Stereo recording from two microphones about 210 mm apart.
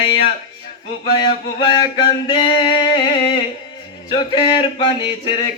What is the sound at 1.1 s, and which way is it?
Male singing, 20° left (ahead or behind).